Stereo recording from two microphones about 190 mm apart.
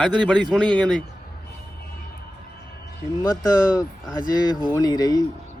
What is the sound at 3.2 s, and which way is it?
Speech, 20° left (ahead or behind).